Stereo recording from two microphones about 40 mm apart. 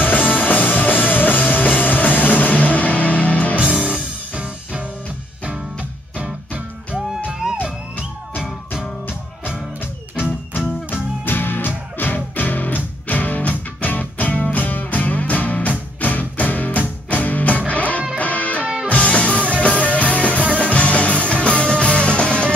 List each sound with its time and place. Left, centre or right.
0.0 s music: left
3.8 s music: right
6.1 s music: right
10.9 s music: left